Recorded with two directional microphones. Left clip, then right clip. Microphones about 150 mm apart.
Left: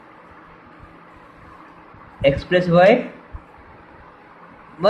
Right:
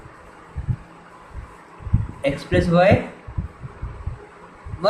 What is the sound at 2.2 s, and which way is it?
Speech, 50° left (ahead or behind).